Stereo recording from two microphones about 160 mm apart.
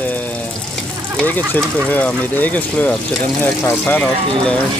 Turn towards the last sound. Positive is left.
turn(degrees=10)  # may be behind; listen again after turning